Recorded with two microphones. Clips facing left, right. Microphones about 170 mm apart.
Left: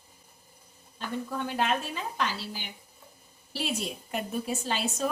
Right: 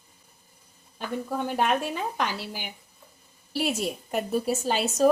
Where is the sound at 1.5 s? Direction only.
50° right (ahead or behind).